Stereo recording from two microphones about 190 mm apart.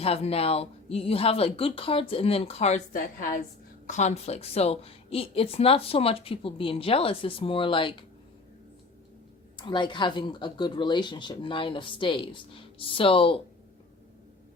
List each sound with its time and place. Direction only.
0.0 s a woman's voice: 30° left (ahead or behind)
9.6 s speech: 25° left (ahead or behind)